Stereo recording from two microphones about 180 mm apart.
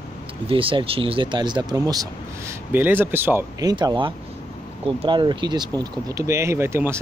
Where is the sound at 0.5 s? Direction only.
30° right (ahead or behind).